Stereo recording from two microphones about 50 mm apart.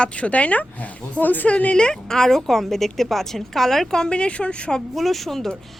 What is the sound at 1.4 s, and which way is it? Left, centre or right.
A woman's voice, left.